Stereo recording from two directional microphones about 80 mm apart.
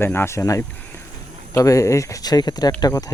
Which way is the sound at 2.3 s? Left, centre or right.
Left.